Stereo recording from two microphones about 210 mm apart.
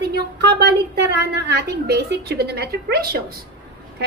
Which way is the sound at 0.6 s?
50° right (ahead or behind).